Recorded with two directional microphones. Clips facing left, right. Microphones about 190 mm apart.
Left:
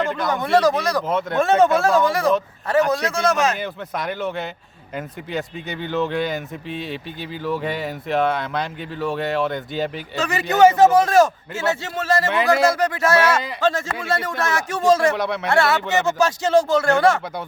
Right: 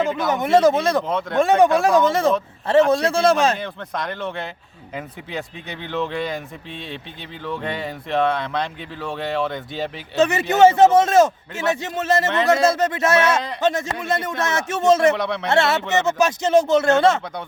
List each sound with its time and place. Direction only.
0.0 s a sound: centre (ahead or behind)
0.3 s a man's voice: 20° right (ahead or behind)
1.0 s speech: 5° left (ahead or behind)
1.4 s a man's voice: 15° right (ahead or behind); by 3.6 s 30° right (ahead or behind)
3.6 s speech: 5° left (ahead or behind)
10.2 s a man's voice: 25° right (ahead or behind)
15.1 s speech: centre (ahead or behind)
15.4 s a man's voice: 25° right (ahead or behind)